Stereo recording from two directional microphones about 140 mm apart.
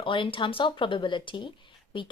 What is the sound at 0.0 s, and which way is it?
A woman's voice, 35° left (ahead or behind).